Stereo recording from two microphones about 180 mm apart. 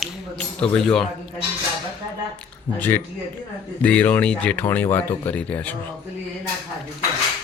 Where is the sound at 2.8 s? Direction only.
10° left (ahead or behind).